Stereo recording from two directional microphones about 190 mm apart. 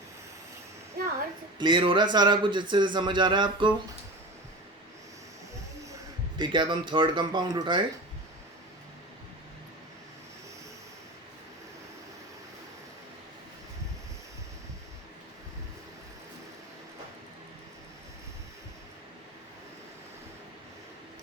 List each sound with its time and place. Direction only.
1.0 s a sound: 50° right (ahead or behind)
1.5 s speech: 25° right (ahead or behind)
6.3 s speech: 25° right (ahead or behind)